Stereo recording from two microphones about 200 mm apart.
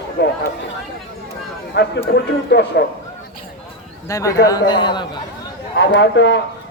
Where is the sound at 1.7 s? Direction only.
55° left (ahead or behind).